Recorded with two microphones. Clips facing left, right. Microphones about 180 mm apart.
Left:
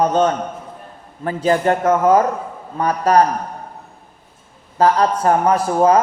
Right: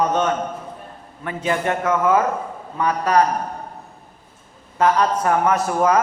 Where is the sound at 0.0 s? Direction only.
35° left (ahead or behind).